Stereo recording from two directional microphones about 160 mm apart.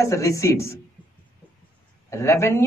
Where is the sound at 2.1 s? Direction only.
15° left (ahead or behind).